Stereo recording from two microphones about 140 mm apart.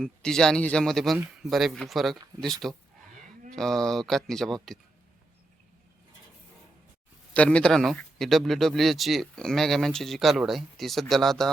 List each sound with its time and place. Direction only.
0.0 s speech: 5° left (ahead or behind)
7.3 s speech: 10° left (ahead or behind)